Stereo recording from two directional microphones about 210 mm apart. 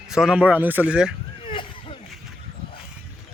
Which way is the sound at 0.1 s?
5° right (ahead or behind).